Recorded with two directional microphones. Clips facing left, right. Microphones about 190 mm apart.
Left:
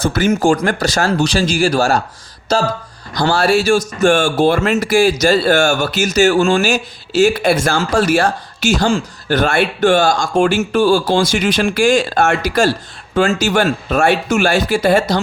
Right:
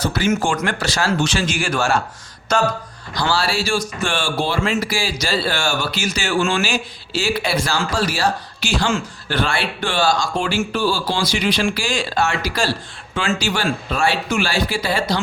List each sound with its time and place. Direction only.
0.0 s speech: 45° left (ahead or behind); by 2.6 s 30° left (ahead or behind)
3.2 s speech: 45° left (ahead or behind)